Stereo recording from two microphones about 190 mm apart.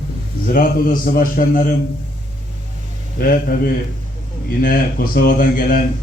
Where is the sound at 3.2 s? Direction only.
50° left (ahead or behind).